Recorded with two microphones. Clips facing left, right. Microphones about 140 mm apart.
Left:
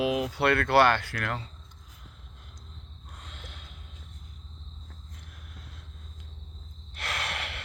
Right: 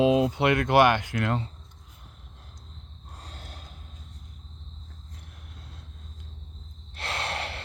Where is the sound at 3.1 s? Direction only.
35° right (ahead or behind).